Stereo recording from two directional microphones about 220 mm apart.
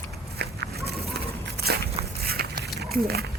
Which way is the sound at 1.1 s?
45° right (ahead or behind).